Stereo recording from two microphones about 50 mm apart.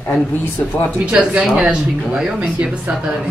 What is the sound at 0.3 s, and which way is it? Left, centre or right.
Speech, left.